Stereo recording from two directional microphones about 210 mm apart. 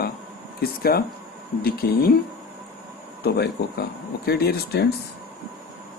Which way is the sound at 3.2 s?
50° left (ahead or behind).